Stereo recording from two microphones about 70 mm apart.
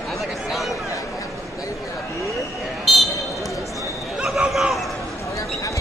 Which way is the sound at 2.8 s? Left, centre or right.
Centre.